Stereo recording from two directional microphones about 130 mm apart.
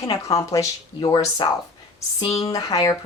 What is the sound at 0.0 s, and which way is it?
Speech, 25° left (ahead or behind).